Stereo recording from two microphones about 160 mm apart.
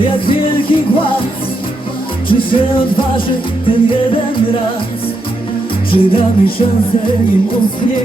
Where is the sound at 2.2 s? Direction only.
30° left (ahead or behind).